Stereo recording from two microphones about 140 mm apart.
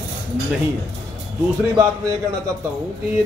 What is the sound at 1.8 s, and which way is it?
Speech, 20° right (ahead or behind).